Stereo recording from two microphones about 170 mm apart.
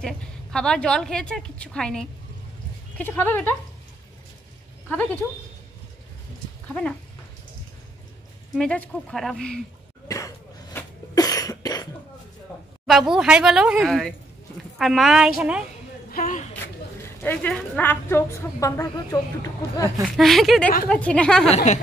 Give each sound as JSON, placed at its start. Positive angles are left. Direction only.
{"t": 0.0, "sound": "a woman's voice", "side_deg": 5}
{"t": 4.8, "sound": "speech", "side_deg": 10}
{"t": 6.7, "sound": "a woman's voice", "side_deg": 5}
{"t": 8.5, "sound": "a woman's voice", "side_deg": 5}
{"t": 10.0, "sound": "cough", "side_deg": 20}
{"t": 12.8, "sound": "a woman's voice", "side_deg": 0}
{"t": 16.1, "sound": "speech", "side_deg": 50}
{"t": 17.0, "sound": "a woman's voice", "side_deg": 10}
{"t": 20.1, "sound": "a woman's voice", "side_deg": 0}
{"t": 21.5, "sound": "speech", "side_deg": 40}